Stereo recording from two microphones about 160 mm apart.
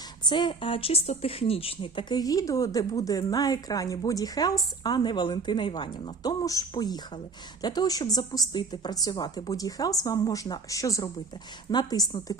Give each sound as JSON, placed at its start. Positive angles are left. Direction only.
{"t": 0.3, "sound": "speech", "side_deg": 30}